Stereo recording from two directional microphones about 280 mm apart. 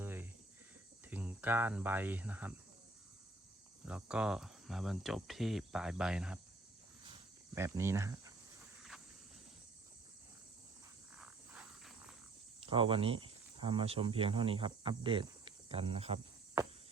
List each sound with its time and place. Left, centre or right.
0.0 s cricket: centre
1.1 s speech: centre
3.8 s speech: centre
7.0 s cricket: centre
11.2 s walk: centre
12.6 s speech: centre